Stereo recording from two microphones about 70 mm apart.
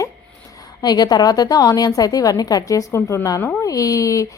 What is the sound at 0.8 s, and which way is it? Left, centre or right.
A woman's voice, left.